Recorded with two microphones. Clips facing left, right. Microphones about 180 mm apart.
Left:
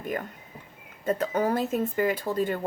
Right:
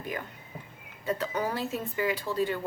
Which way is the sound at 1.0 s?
50° left (ahead or behind).